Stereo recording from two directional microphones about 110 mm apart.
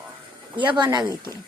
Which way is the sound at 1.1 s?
35° right (ahead or behind).